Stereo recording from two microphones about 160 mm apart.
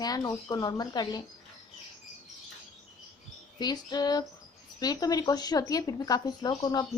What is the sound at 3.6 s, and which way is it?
A woman's voice, 25° left (ahead or behind).